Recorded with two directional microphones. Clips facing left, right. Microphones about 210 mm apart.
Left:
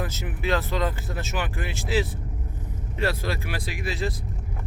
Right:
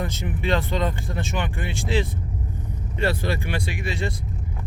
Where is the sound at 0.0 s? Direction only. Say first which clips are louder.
Right 2 dB; 5° left (ahead or behind).